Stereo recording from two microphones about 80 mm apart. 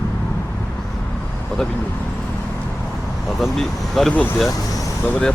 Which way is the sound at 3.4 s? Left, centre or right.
Centre.